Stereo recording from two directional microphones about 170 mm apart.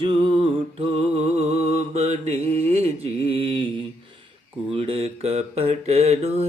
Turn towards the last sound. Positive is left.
turn(degrees=-40)  # may be behind; listen again after turning